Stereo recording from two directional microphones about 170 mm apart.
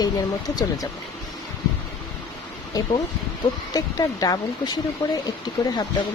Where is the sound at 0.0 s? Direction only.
25° left (ahead or behind).